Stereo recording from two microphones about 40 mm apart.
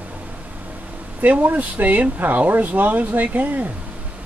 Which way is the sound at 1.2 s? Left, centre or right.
Right.